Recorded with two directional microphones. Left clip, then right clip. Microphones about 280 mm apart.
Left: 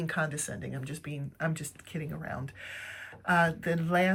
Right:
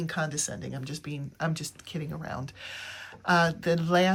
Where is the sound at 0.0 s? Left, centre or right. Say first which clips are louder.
Right 1 dB; centre.